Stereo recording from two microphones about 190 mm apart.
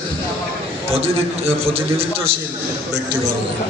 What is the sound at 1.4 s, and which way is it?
Speech, 30° right (ahead or behind).